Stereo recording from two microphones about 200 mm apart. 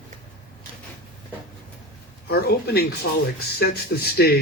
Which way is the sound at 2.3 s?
55° left (ahead or behind).